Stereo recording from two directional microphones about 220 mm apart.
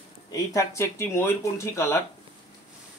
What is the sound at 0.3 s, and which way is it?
Speech, 15° left (ahead or behind).